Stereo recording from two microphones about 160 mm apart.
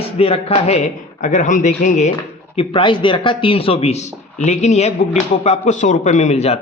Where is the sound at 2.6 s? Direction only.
35° left (ahead or behind).